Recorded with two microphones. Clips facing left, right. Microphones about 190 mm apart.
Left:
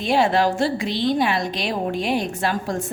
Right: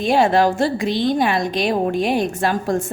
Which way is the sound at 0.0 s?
45° right (ahead or behind).